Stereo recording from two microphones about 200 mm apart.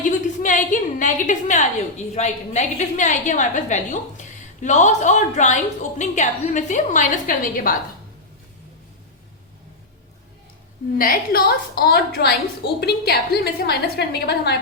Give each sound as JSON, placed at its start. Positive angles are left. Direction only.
{"t": 0.0, "sound": "a woman's voice", "side_deg": 40}
{"t": 10.9, "sound": "a woman's voice", "side_deg": 45}